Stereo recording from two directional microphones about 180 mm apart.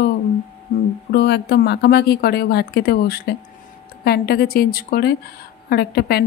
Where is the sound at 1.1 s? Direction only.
65° left (ahead or behind).